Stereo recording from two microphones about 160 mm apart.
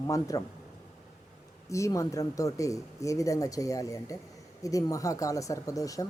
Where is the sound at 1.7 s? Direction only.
20° left (ahead or behind).